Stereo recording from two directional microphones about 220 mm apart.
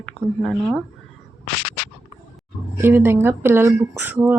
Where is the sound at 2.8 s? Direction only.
10° right (ahead or behind).